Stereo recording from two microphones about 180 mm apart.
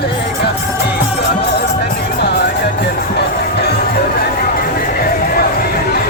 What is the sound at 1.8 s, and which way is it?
Music, 65° left (ahead or behind).